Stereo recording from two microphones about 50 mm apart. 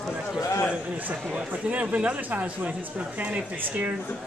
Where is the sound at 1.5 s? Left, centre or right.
Right.